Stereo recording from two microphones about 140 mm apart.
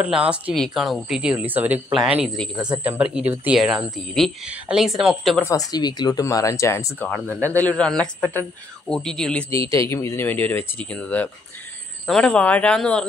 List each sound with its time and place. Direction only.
0.6 s speech: centre (ahead or behind)
2.8 s speech: 10° right (ahead or behind)
5.4 s a man's voice: 25° left (ahead or behind); by 9.5 s 5° left (ahead or behind)
9.5 s a man's voice: 20° left (ahead or behind); by 13.0 s 5° left (ahead or behind)